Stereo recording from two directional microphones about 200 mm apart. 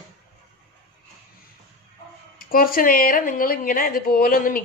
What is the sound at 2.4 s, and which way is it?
A woman's voice, 45° left (ahead or behind).